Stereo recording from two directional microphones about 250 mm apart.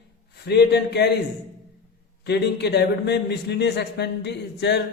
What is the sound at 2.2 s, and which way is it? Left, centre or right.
A man's voice, left.